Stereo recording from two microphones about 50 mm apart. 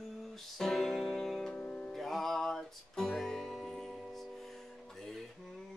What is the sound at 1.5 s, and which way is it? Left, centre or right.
Music, left.